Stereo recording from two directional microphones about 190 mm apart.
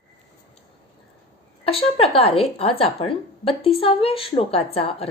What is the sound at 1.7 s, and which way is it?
A woman's voice, 30° left (ahead or behind).